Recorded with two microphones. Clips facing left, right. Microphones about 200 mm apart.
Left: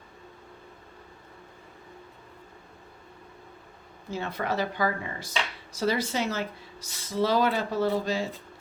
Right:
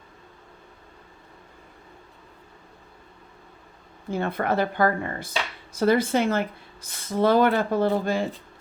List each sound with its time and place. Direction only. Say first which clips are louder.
4.1 s a woman's voice: right 5 dB; 55° right (ahead or behind)